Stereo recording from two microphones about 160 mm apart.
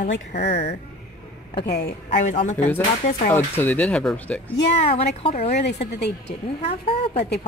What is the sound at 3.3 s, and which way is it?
Speech, 15° left (ahead or behind).